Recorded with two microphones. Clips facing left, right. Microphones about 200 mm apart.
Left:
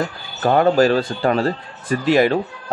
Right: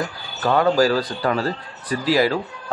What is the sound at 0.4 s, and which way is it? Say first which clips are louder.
A man's voice: left 3 dB; 30° left (ahead or behind).